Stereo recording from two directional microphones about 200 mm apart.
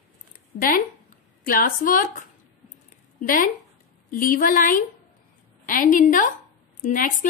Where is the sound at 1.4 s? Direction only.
45° left (ahead or behind).